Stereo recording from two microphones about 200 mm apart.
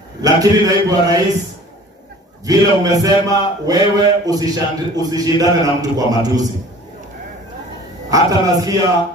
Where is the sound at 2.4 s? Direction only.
15° right (ahead or behind).